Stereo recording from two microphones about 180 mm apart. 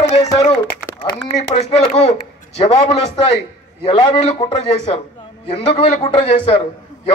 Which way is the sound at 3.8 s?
30° left (ahead or behind).